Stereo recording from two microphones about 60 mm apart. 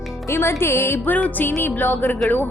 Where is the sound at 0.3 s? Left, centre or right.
Left.